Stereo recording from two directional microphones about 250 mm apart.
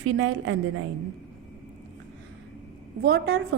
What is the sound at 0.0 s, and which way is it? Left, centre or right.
Speech, right.